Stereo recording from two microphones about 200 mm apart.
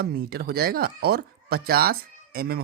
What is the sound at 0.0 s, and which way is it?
Speech, 50° right (ahead or behind).